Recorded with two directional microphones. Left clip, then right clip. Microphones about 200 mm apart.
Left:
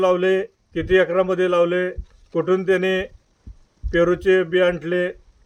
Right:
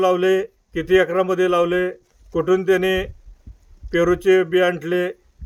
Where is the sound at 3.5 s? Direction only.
50° left (ahead or behind).